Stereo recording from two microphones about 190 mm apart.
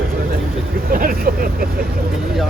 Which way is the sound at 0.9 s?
50° right (ahead or behind).